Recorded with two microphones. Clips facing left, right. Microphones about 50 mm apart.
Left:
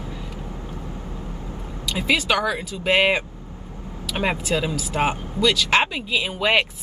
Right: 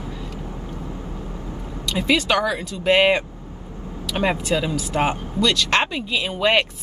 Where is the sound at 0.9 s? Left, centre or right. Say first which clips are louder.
Right 2 dB; right.